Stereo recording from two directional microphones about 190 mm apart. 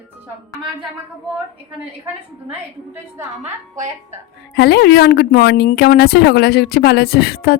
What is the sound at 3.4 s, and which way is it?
Speech, 40° right (ahead or behind).